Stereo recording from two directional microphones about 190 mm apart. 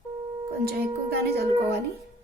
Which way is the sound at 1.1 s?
55° right (ahead or behind).